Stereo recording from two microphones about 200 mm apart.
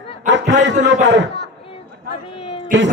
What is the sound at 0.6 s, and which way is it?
Speech, 65° right (ahead or behind).